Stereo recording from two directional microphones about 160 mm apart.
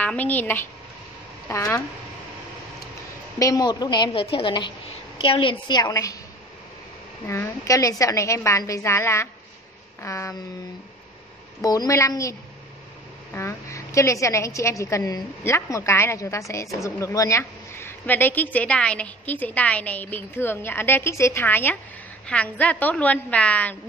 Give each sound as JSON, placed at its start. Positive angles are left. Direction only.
{"t": 0.0, "sound": "a woman's voice", "side_deg": 10}
{"t": 3.3, "sound": "a woman's voice", "side_deg": 20}
{"t": 7.2, "sound": "a woman's voice", "side_deg": 15}
{"t": 11.6, "sound": "a woman's voice", "side_deg": 20}